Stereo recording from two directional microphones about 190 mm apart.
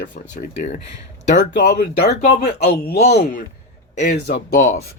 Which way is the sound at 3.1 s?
35° left (ahead or behind).